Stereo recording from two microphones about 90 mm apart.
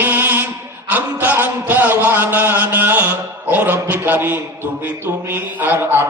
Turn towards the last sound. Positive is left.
turn(degrees=-25)  # may be behind; listen again after turning